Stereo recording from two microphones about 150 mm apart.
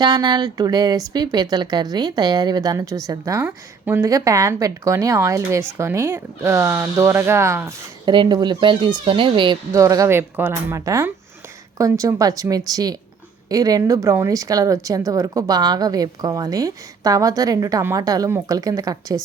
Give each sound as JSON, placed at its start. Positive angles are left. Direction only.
{"t": 0.0, "sound": "a woman's voice", "side_deg": -30}
{"t": 8.0, "sound": "speech", "side_deg": -30}
{"t": 9.7, "sound": "a woman's voice", "side_deg": -20}